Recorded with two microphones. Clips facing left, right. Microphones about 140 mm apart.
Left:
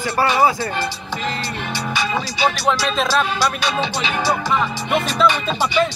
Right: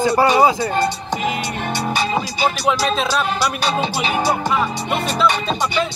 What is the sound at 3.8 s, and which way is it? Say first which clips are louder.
Music: right 2 dB; 45° right (ahead or behind).